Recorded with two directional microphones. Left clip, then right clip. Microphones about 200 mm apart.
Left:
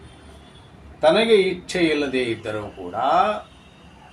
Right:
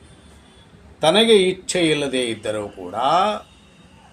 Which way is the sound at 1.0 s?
55° right (ahead or behind).